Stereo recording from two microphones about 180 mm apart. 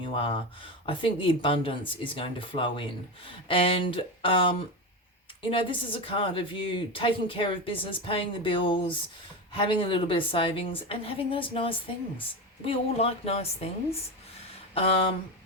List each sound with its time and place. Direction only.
0.0 s speech: 30° left (ahead or behind)
14.8 s speech: 30° left (ahead or behind)